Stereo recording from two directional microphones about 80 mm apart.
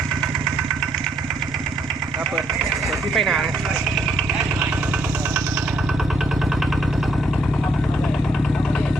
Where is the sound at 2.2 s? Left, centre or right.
Centre.